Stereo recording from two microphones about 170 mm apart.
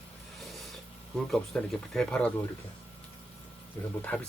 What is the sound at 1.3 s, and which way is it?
Speech, centre (ahead or behind).